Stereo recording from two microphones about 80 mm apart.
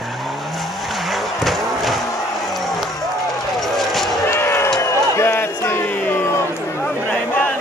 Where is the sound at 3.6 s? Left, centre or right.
Centre.